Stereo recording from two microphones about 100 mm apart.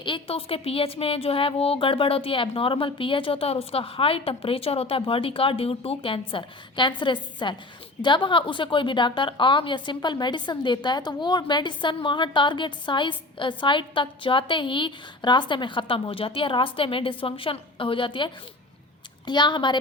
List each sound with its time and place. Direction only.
0.0 s a woman's voice: 60° left (ahead or behind)